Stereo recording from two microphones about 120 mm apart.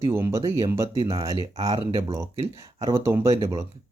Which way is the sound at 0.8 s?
50° right (ahead or behind).